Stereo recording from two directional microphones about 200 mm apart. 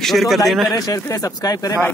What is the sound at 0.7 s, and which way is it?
A man's voice, 15° left (ahead or behind).